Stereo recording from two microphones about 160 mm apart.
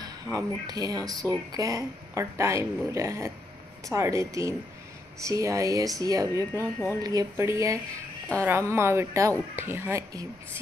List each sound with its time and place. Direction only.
0.0 s speech: 25° right (ahead or behind)